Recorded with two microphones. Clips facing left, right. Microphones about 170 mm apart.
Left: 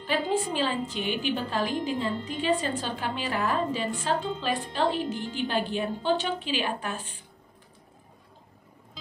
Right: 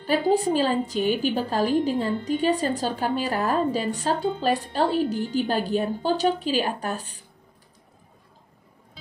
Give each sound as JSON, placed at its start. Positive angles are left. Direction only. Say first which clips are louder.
{"t": 0.0, "sound": "a woman's voice", "louder": "right 6 dB", "side_deg": -40}